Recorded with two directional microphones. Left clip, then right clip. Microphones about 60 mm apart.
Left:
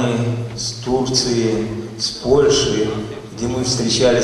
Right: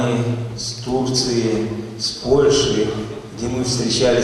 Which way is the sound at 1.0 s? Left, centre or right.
Left.